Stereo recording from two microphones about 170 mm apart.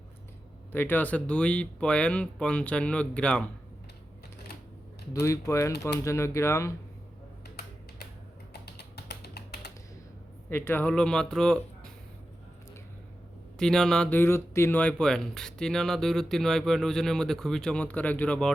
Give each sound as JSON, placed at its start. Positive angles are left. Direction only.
{"t": 0.7, "sound": "speech", "side_deg": 10}
{"t": 5.2, "sound": "speech", "side_deg": 15}
{"t": 8.6, "sound": "music", "side_deg": 75}
{"t": 10.5, "sound": "speech", "side_deg": 10}
{"t": 13.6, "sound": "speech", "side_deg": 5}